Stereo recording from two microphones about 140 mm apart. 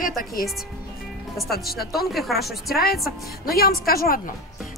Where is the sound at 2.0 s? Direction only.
Centre (ahead or behind).